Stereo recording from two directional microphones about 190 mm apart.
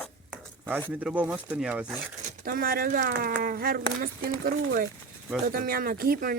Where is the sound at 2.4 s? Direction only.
50° right (ahead or behind).